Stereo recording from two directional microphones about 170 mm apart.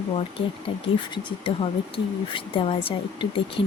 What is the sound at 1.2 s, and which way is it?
Speech, 30° left (ahead or behind).